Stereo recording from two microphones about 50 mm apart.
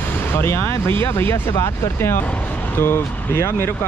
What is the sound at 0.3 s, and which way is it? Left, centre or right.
Speech, left.